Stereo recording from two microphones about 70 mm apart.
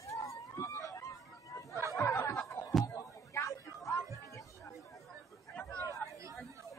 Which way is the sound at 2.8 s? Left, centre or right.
Left.